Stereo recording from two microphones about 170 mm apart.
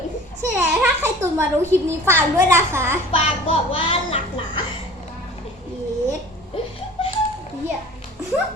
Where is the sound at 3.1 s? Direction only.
35° left (ahead or behind).